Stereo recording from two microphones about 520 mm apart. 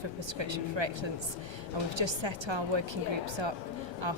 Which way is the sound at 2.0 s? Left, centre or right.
Right.